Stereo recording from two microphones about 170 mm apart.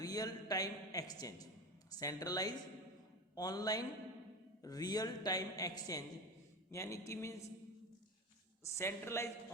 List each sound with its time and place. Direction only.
0.0 s a woman's voice: 20° left (ahead or behind)
8.6 s a man's voice: 15° left (ahead or behind)